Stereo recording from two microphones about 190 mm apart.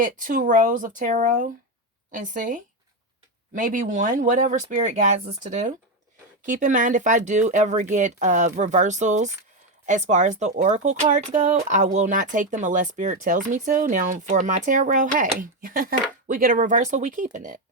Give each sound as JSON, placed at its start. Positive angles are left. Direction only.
{"t": 0.0, "sound": "speech", "side_deg": -45}